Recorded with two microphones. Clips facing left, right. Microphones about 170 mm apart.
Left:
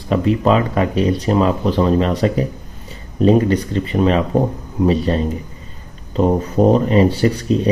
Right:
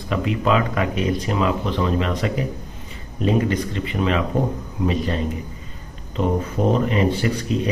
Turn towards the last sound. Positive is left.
turn(degrees=35)  # may be behind; listen again after turning